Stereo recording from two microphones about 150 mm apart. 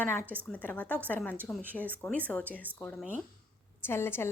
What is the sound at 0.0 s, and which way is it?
A woman's voice, 10° left (ahead or behind).